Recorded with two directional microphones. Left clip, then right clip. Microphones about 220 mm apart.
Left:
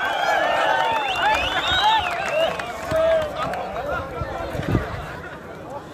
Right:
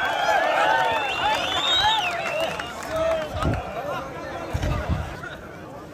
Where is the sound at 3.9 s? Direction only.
50° right (ahead or behind).